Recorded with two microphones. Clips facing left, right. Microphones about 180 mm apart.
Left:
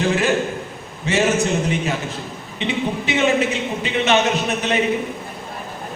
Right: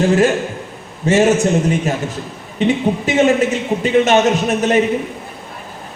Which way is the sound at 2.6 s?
45° right (ahead or behind).